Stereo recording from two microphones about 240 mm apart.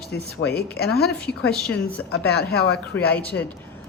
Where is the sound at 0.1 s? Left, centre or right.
Left.